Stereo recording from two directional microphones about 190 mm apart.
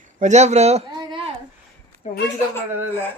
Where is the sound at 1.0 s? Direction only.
25° right (ahead or behind).